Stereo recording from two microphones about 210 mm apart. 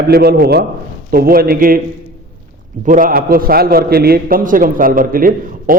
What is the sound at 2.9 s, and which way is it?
A man's voice, 40° right (ahead or behind).